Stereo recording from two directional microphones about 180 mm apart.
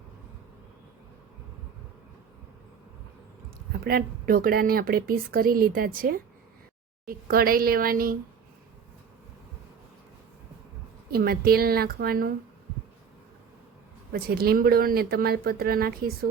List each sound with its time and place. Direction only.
3.7 s a woman's voice: 55° right (ahead or behind)
11.1 s speech: 55° right (ahead or behind)
14.1 s speech: 60° right (ahead or behind)